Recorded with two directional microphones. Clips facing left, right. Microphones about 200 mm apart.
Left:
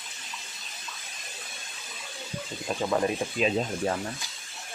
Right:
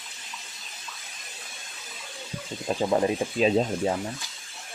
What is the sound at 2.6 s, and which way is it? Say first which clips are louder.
Speech: right 3 dB; 30° right (ahead or behind).